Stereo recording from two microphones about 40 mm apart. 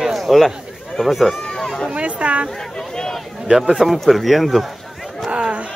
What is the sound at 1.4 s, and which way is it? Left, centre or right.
Chatter, centre.